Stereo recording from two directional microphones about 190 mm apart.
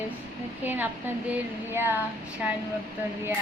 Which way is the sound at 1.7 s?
10° right (ahead or behind).